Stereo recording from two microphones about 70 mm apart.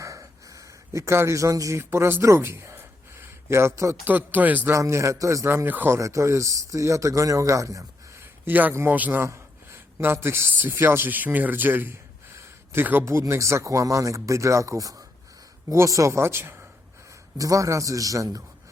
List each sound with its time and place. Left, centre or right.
0.0 s speech: right
4.0 s speech: right
4.7 s speech: right
5.6 s speech: right
5.9 s speech: right
8.4 s speech: right
10.0 s speech: right
12.4 s a sound: right
13.1 s speech: right
17.3 s speech: right